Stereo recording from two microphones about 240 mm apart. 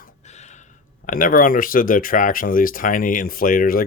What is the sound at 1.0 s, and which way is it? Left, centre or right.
Speech, left.